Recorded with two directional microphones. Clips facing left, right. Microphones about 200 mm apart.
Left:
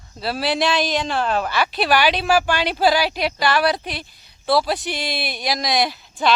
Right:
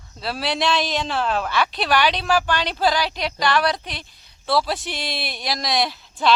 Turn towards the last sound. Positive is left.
turn(degrees=0)  # may be behind; listen again after turning